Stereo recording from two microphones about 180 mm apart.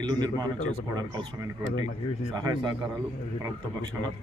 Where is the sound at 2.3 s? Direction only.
20° right (ahead or behind).